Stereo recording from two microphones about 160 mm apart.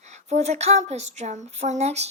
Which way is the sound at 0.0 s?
45° right (ahead or behind).